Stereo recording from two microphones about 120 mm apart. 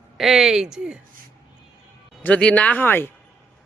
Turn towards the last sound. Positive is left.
turn(degrees=15)  # may be behind; listen again after turning